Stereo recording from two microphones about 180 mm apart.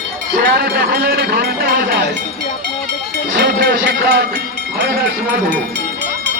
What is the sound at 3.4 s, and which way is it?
Speech, 55° right (ahead or behind).